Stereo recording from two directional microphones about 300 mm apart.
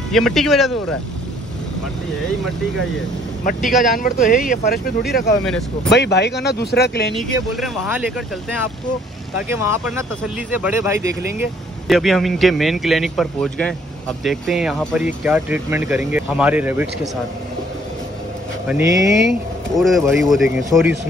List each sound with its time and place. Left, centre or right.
0.1 s speech: centre
3.8 s speech: left
7.6 s speech: centre
9.7 s speech: centre
18.7 s speech: centre
19.8 s speech: centre